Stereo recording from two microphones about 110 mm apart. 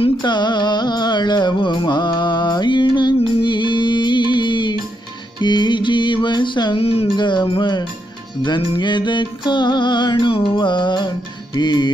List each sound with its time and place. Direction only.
0.2 s music: 45° left (ahead or behind)
6.8 s music: 65° left (ahead or behind)
7.2 s music: 45° left (ahead or behind)